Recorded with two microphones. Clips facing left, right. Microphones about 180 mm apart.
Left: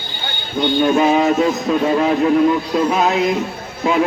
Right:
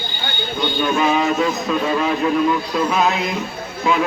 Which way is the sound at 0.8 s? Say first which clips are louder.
Left 4 dB; 35° left (ahead or behind).